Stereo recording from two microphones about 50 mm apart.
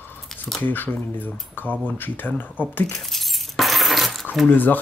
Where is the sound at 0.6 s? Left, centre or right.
Left.